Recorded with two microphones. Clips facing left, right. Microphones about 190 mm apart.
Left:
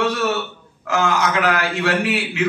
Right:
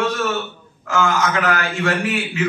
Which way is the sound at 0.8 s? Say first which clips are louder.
Even; 65° left (ahead or behind).